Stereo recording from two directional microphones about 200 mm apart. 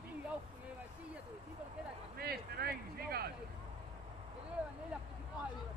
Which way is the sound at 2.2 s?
50° right (ahead or behind).